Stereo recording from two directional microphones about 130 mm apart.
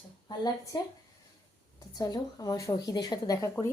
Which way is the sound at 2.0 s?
30° left (ahead or behind).